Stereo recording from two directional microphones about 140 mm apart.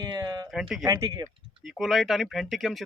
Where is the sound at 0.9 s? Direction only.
20° right (ahead or behind).